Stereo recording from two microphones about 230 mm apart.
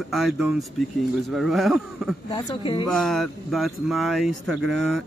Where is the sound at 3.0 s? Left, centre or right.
Centre.